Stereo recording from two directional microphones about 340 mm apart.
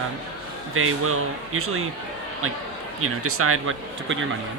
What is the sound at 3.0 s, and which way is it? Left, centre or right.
Speech, right.